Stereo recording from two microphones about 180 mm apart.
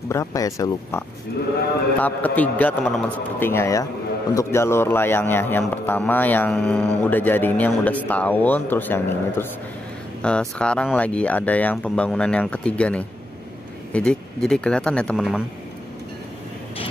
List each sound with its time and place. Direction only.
0.1 s a man's voice: 20° left (ahead or behind); by 15.4 s centre (ahead or behind)